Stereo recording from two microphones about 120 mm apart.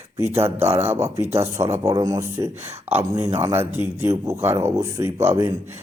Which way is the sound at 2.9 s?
15° right (ahead or behind).